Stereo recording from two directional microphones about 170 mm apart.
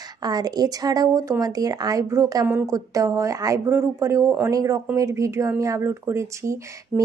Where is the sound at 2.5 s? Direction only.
10° right (ahead or behind).